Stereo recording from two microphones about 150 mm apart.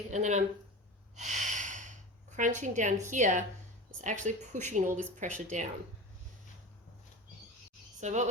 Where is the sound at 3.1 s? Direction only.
55° right (ahead or behind).